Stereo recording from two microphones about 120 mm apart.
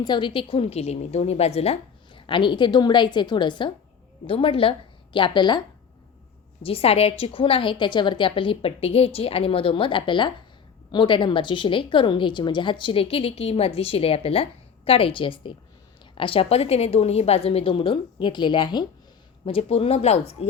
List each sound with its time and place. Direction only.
0.0 s a woman's voice: 40° left (ahead or behind)
6.6 s a woman's voice: 55° left (ahead or behind)
19.5 s a woman's voice: 50° left (ahead or behind)